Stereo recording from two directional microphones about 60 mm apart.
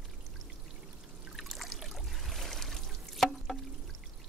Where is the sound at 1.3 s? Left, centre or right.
Centre.